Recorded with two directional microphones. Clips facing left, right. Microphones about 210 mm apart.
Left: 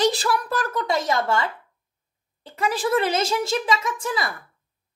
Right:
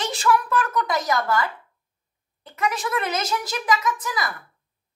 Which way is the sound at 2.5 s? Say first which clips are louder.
Left 4 dB; 30° left (ahead or behind).